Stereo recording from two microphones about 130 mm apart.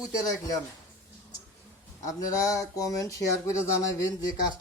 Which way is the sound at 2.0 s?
25° left (ahead or behind).